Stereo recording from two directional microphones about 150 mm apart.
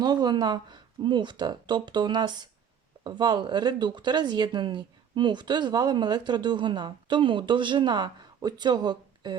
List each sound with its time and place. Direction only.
0.0 s speech: 30° right (ahead or behind)